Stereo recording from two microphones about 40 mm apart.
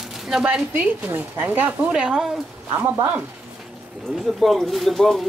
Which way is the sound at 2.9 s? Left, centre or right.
Right.